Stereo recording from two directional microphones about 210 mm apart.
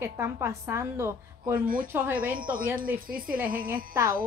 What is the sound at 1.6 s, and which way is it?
Speech, 40° right (ahead or behind).